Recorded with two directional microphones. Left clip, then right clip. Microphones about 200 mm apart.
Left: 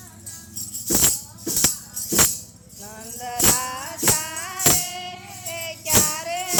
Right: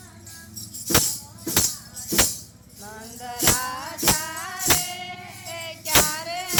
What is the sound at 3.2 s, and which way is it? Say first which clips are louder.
Music: left 1 dB; 10° left (ahead or behind).